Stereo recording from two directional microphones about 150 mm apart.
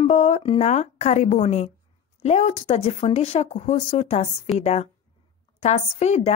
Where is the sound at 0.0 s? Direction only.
45° left (ahead or behind).